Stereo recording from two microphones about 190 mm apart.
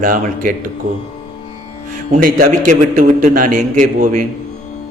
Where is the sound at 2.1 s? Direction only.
45° right (ahead or behind).